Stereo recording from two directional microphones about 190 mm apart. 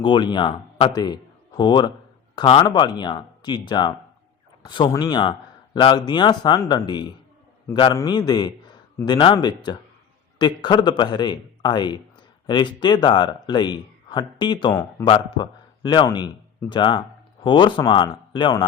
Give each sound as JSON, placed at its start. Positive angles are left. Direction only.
{"t": 0.0, "sound": "a man's voice", "side_deg": 25}